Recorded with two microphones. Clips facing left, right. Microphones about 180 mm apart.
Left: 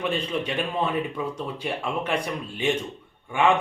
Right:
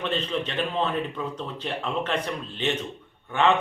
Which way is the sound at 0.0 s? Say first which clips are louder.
Left 1 dB; 10° left (ahead or behind).